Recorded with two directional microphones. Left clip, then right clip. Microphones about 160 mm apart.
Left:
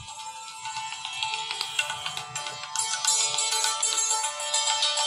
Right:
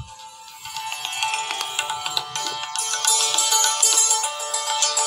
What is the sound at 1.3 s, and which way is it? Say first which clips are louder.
Music: right 4 dB; 50° right (ahead or behind).